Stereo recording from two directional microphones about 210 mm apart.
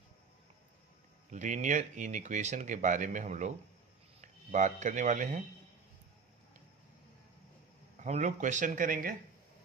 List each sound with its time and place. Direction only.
1.3 s speech: 35° right (ahead or behind)
7.9 s speech: 35° right (ahead or behind)